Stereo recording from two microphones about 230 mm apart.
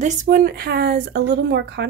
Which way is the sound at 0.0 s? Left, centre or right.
Right.